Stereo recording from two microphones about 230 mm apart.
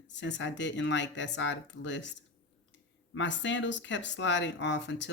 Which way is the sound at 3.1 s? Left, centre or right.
Left.